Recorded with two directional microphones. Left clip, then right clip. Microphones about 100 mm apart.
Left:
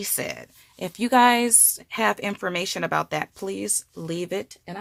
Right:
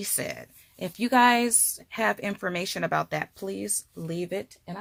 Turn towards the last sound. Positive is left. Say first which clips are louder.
# left 3 dB
turn(degrees=45)  # may be behind; listen again after turning